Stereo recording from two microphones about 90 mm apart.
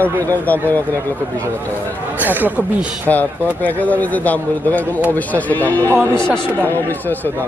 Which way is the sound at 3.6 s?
15° left (ahead or behind).